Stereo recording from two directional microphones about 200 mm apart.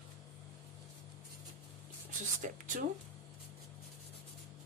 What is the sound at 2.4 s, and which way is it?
Speech, 40° right (ahead or behind).